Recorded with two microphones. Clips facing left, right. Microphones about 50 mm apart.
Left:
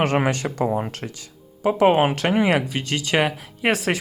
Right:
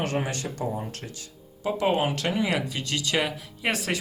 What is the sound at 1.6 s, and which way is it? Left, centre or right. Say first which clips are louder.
Speech: left 8 dB; left.